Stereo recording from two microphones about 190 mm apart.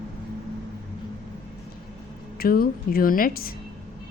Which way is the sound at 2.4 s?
50° left (ahead or behind).